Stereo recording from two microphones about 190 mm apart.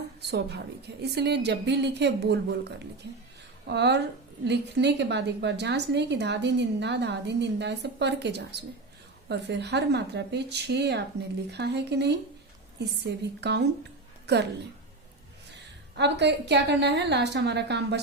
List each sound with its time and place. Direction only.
0.2 s a woman's voice: 60° right (ahead or behind)
13.4 s a woman's voice: 65° right (ahead or behind)
15.5 s a woman's voice: 65° right (ahead or behind)